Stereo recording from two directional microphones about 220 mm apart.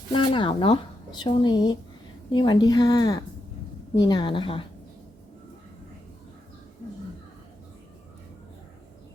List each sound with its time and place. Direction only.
0.1 s speech: 20° left (ahead or behind)